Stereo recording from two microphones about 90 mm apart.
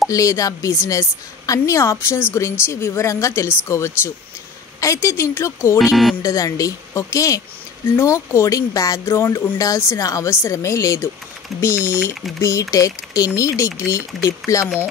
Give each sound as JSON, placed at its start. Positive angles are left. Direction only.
{"t": 0.1, "sound": "speech", "side_deg": 35}
{"t": 5.9, "sound": "speech", "side_deg": 0}
{"t": 6.2, "sound": "speech", "side_deg": 40}
{"t": 7.8, "sound": "speech", "side_deg": 25}
{"t": 12.4, "sound": "speech", "side_deg": 35}